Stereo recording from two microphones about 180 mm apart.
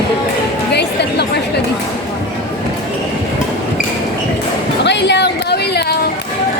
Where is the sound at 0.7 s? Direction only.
65° left (ahead or behind).